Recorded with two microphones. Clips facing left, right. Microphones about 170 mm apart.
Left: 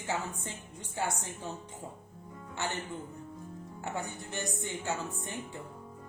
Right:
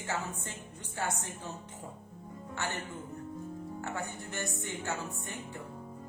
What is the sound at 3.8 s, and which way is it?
Speech, 15° left (ahead or behind).